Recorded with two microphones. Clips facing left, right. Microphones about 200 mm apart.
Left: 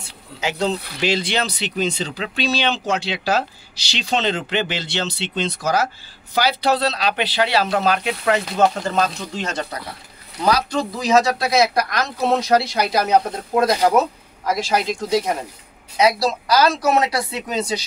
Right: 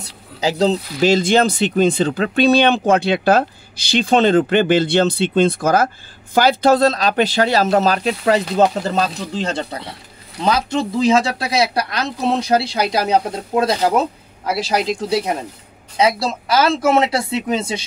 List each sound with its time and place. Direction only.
0.0 s a man's voice: 35° right (ahead or behind)